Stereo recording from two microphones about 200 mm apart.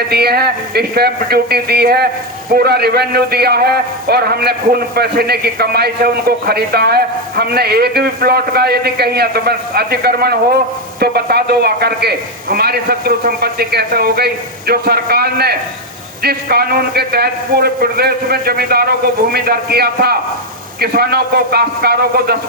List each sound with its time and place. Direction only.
0.1 s a man's voice: 50° right (ahead or behind)